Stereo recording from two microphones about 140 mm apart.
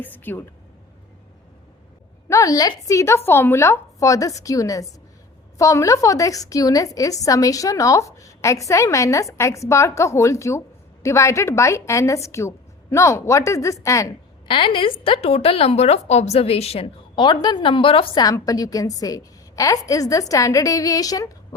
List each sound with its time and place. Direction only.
0.0 s speech: 15° left (ahead or behind)
2.3 s a woman's voice: 25° left (ahead or behind)
14.4 s a woman's voice: 35° left (ahead or behind)
17.2 s a woman's voice: 30° left (ahead or behind)
18.2 s a woman's voice: 25° left (ahead or behind)